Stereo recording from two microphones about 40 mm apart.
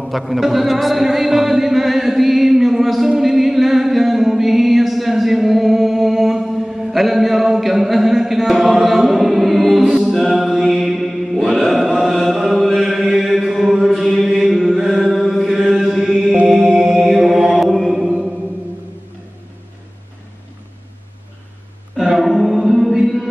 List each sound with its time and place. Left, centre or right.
0.0 s a sound: centre
13.3 s mantra: centre
13.9 s chant: centre
15.5 s mantra: centre
16.4 s chant: centre
21.9 s choir: centre